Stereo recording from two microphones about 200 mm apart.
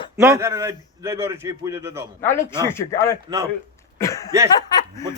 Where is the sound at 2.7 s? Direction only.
15° left (ahead or behind).